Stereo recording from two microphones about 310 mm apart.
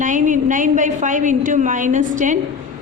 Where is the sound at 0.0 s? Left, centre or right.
Right.